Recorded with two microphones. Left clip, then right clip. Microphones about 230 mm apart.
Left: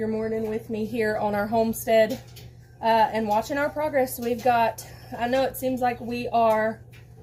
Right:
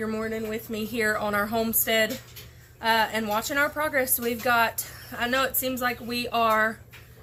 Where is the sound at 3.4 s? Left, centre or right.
Centre.